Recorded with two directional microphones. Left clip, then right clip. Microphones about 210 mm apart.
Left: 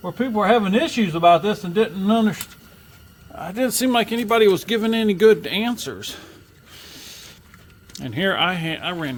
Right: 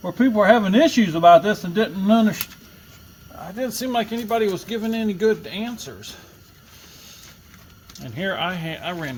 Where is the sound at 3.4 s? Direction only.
40° left (ahead or behind).